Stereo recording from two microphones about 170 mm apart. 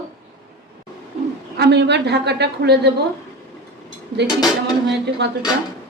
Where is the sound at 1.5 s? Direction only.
80° right.